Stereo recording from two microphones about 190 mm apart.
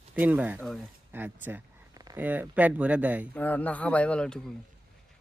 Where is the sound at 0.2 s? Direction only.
10° right (ahead or behind).